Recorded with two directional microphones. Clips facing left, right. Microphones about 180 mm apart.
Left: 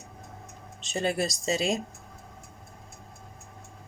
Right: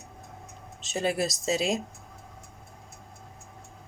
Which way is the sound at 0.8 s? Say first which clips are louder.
Even; centre (ahead or behind).